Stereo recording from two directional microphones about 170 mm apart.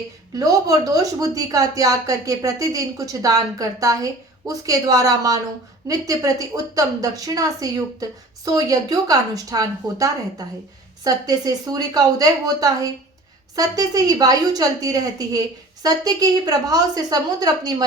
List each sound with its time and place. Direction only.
0.3 s a woman's voice: 20° right (ahead or behind)